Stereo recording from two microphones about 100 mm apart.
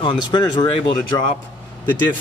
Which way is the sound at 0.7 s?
65° left (ahead or behind).